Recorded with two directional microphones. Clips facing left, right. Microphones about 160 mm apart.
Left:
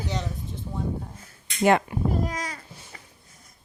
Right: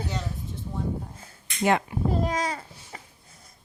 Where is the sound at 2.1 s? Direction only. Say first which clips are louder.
Right 4 dB; 25° right (ahead or behind).